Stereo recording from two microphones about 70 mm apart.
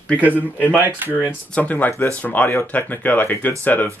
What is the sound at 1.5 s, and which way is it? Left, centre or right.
Speech, left.